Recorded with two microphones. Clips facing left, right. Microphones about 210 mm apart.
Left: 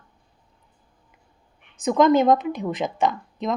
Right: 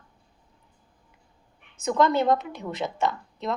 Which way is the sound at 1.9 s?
15° left (ahead or behind).